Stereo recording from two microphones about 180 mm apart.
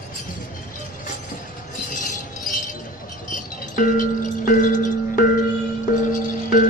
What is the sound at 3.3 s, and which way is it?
Music, 45° left (ahead or behind).